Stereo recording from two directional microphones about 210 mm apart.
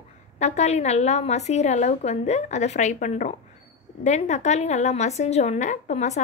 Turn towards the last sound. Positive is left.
turn(degrees=35)  # may be behind; listen again after turning